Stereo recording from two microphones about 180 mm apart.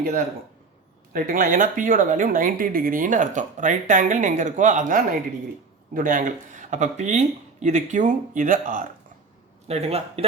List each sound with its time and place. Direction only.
1.1 s speech: 50° right (ahead or behind)
9.6 s a man's voice: 35° right (ahead or behind)